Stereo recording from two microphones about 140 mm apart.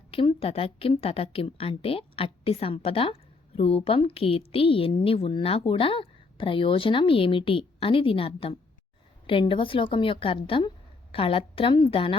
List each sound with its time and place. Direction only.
0.1 s a woman's voice: 40° left (ahead or behind)